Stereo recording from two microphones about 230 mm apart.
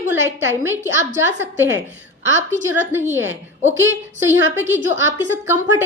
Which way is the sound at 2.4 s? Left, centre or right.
Right.